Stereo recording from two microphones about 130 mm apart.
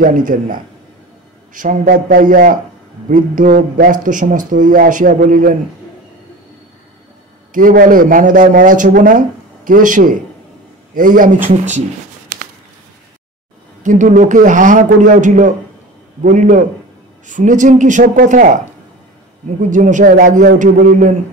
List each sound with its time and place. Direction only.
0.0 s speech: 90° right
7.5 s speech: 90° right
13.8 s a man's voice: 75° right (ahead or behind)
19.7 s a man's voice: 75° right (ahead or behind)